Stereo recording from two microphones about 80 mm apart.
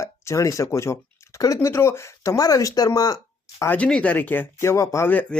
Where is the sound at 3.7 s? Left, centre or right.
Centre.